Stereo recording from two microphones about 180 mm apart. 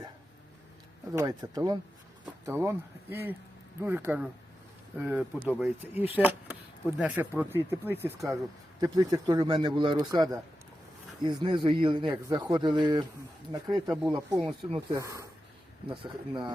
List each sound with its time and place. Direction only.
1.1 s a man's voice: 20° right (ahead or behind)
13.8 s speech: centre (ahead or behind)
14.1 s a man's voice: 20° right (ahead or behind)